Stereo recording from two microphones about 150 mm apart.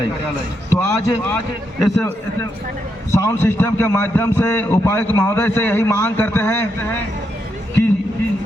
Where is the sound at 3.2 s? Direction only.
15° left (ahead or behind).